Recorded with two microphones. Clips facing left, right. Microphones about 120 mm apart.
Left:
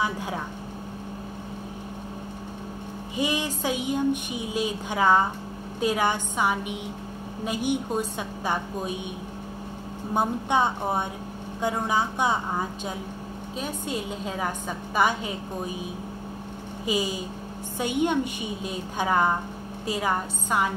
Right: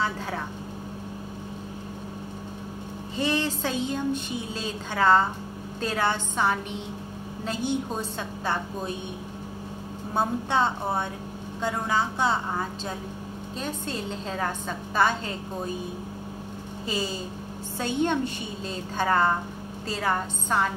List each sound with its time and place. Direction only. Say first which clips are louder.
0.0 s a woman's voice: left 1 dB; 15° left (ahead or behind)
3.2 s a woman's voice: right 1 dB; 10° left (ahead or behind)
10.1 s a woman's voice: left 1 dB; 15° left (ahead or behind)
16.8 s a woman's voice: left 3 dB; 15° left (ahead or behind)